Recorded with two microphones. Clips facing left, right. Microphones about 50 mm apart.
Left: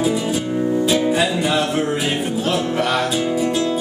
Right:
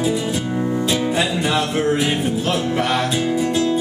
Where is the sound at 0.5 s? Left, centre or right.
Centre.